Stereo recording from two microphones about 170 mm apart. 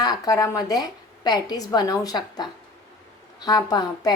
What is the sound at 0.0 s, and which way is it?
A woman's voice, 20° left (ahead or behind).